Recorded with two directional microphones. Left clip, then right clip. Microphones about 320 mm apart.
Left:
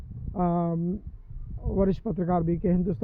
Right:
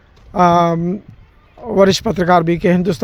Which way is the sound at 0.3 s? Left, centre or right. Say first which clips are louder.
Right 17 dB; centre.